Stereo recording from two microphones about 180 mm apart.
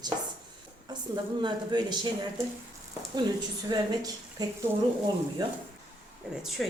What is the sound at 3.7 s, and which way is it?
Speech, 20° right (ahead or behind).